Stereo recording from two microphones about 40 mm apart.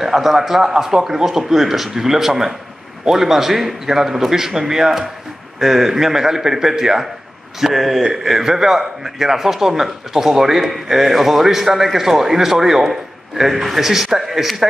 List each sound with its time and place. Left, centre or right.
0.0 s a man's voice: centre
8.0 s a man's voice: centre